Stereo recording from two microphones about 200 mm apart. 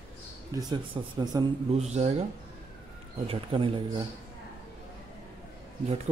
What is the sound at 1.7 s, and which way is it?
Speech, 35° right (ahead or behind).